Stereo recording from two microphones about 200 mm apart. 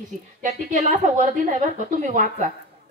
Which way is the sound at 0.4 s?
35° right (ahead or behind).